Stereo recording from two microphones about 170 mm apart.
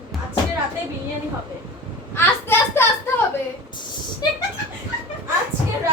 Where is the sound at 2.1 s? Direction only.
15° left (ahead or behind).